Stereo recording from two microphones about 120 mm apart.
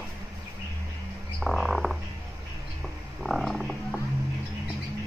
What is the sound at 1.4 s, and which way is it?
Frog, centre (ahead or behind).